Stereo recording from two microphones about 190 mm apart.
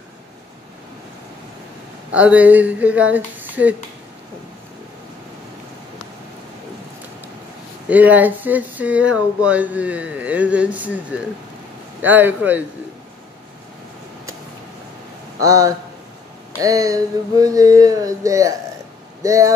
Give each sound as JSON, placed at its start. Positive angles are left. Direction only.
{"t": 2.1, "sound": "speech", "side_deg": -5}
{"t": 7.9, "sound": "speech", "side_deg": -10}
{"t": 15.4, "sound": "speech", "side_deg": -15}
{"t": 16.6, "sound": "a sound", "side_deg": -20}
{"t": 19.2, "sound": "speech", "side_deg": -15}